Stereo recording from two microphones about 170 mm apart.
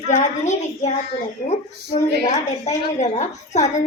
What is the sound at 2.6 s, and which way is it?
A woman's voice, 40° left (ahead or behind).